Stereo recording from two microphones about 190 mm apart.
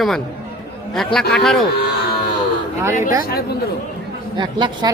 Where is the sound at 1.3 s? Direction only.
5° left (ahead or behind).